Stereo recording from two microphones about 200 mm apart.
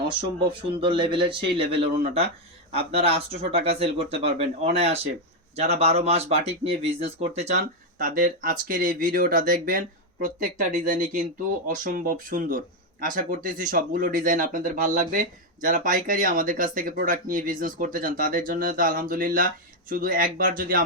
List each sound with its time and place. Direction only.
0.8 s speech: 25° right (ahead or behind); by 20.8 s 45° right (ahead or behind)